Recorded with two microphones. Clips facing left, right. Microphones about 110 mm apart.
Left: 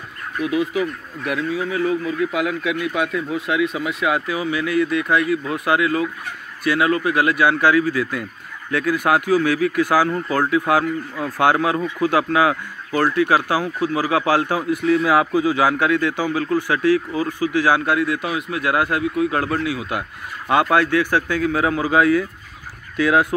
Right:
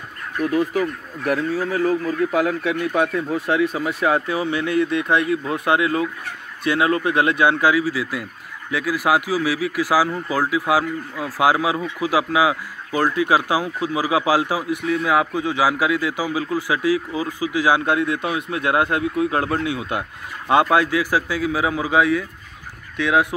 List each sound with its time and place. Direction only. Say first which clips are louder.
0.4 s speech: right 1 dB; 45° right (ahead or behind); by 7.7 s 25° right (ahead or behind)
7.7 s speech: left 2 dB; 10° right (ahead or behind)
14.8 s a man's voice: left 4 dB; centre (ahead or behind)
15.7 s speech: left 2 dB; 10° right (ahead or behind)